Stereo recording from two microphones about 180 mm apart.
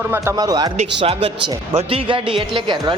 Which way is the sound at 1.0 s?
30° right (ahead or behind).